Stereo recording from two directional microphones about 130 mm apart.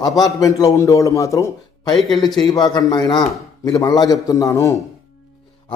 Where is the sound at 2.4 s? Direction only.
30° left (ahead or behind).